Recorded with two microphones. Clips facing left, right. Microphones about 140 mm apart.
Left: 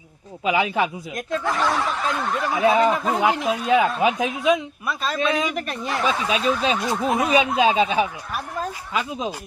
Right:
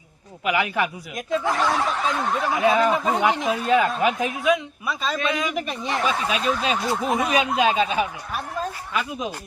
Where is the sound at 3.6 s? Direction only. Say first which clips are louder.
Left 1 dB; 15° left (ahead or behind).